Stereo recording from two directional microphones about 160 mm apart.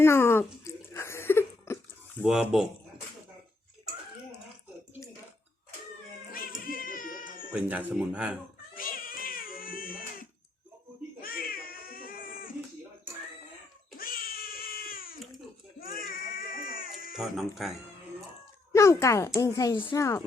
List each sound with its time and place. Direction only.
0.0 s a sound: 15° left (ahead or behind)
2.2 s speech: 5° right (ahead or behind)
6.7 s cat: 60° left (ahead or behind)
7.5 s speech: 10° right (ahead or behind)
8.7 s cat: 60° left (ahead or behind)
14.0 s cat: 65° left (ahead or behind)
15.8 s baby cry: 65° left (ahead or behind)
17.2 s speech: centre (ahead or behind)
18.7 s a child's voice: 15° left (ahead or behind)